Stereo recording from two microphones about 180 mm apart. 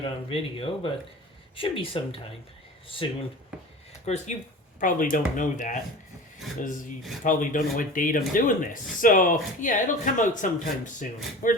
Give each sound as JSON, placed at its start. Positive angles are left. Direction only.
{"t": 0.0, "sound": "speech", "side_deg": 30}
{"t": 4.8, "sound": "speech", "side_deg": 50}